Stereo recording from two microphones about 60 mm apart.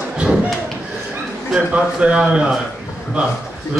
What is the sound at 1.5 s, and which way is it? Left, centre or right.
A man's voice, centre.